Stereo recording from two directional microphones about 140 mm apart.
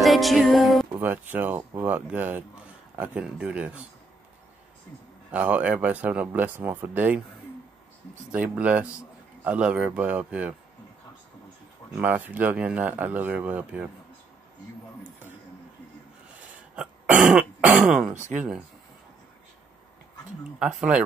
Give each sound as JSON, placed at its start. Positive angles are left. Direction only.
{"t": 0.0, "sound": "music", "side_deg": 0}
{"t": 1.0, "sound": "speech", "side_deg": -15}
{"t": 5.3, "sound": "speech", "side_deg": -10}
{"t": 8.3, "sound": "speech", "side_deg": -10}
{"t": 12.0, "sound": "speech", "side_deg": -10}
{"t": 16.7, "sound": "throat clearing", "side_deg": -10}
{"t": 18.1, "sound": "speech", "side_deg": -60}
{"t": 20.5, "sound": "speech", "side_deg": -5}